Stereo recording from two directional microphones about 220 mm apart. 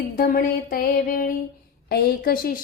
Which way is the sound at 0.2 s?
40° left (ahead or behind).